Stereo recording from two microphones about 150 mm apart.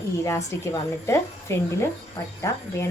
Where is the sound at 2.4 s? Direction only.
20° left (ahead or behind).